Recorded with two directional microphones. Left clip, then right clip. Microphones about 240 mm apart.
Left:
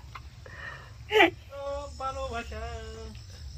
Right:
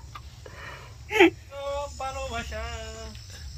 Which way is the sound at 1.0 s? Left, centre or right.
Left.